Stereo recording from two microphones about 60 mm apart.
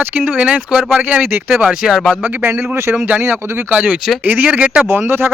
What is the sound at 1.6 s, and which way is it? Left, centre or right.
Speech, centre.